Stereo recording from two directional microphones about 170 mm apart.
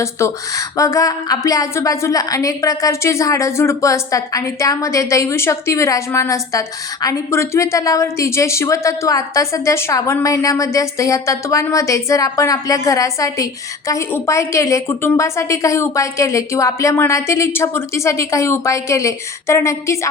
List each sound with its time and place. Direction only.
0.0 s a woman's voice: 20° left (ahead or behind)